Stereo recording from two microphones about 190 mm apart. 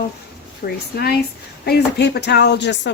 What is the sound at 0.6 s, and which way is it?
A woman's voice, 55° left (ahead or behind).